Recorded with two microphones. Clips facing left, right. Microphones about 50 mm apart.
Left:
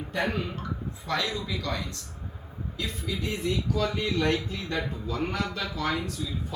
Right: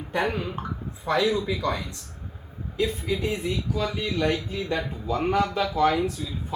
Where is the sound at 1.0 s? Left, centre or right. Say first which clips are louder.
Right 7 dB; centre.